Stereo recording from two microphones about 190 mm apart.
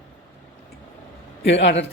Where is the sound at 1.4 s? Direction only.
70° left (ahead or behind).